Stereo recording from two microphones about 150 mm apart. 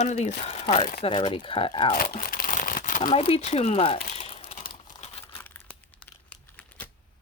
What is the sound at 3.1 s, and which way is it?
Speech, 40° left (ahead or behind).